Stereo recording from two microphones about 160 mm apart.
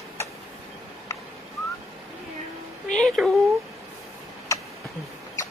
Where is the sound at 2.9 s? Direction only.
5° left (ahead or behind).